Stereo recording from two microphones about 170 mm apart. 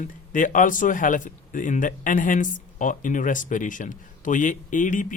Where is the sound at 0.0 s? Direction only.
50° left (ahead or behind).